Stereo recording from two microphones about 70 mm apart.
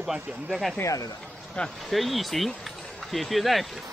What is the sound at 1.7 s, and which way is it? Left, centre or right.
Speech, centre.